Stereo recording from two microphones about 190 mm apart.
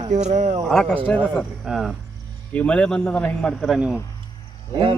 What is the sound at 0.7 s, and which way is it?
Speech, 5° left (ahead or behind).